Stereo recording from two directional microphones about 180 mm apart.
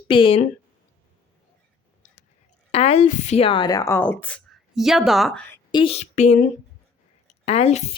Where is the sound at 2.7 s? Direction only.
35° left (ahead or behind); by 5.4 s centre (ahead or behind).